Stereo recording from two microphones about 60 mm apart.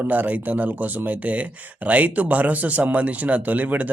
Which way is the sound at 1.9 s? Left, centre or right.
Right.